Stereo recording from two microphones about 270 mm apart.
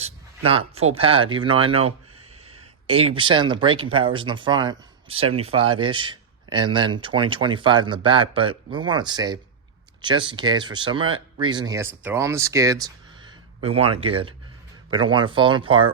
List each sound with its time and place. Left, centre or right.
0.0 s speech: right